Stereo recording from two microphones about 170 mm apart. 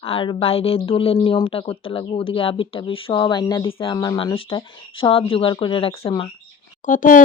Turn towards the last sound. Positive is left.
turn(degrees=50)  # may be behind; listen again after turning